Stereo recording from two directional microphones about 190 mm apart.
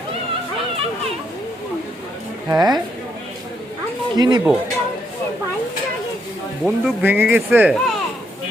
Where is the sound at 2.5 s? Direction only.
20° right (ahead or behind).